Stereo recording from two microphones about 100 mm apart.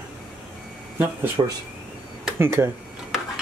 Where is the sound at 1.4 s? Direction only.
45° right (ahead or behind).